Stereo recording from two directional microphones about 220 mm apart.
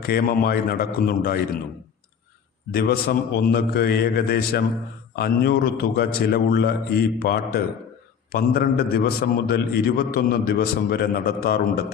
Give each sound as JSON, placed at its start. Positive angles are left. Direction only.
{"t": 0.0, "sound": "a man's voice", "side_deg": 45}
{"t": 2.7, "sound": "a man's voice", "side_deg": 45}